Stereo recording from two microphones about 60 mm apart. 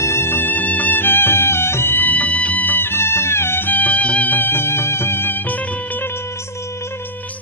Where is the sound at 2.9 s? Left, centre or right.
Left.